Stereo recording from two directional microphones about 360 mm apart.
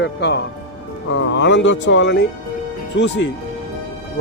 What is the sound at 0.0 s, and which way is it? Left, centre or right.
Speech, left.